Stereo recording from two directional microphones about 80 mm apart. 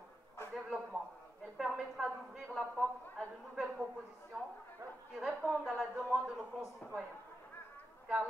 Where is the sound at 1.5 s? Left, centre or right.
Centre.